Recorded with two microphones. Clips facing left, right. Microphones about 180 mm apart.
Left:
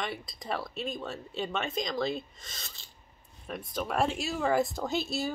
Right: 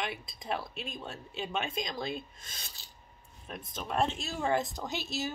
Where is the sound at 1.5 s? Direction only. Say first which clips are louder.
Left 1 dB; 10° right (ahead or behind).